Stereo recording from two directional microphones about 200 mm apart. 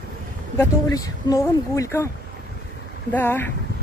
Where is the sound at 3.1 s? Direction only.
10° left (ahead or behind).